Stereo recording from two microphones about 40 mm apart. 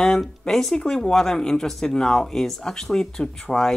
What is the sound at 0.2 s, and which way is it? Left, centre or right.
Speech, centre.